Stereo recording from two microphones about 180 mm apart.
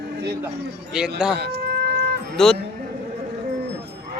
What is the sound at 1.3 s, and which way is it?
Chicken, 65° right (ahead or behind).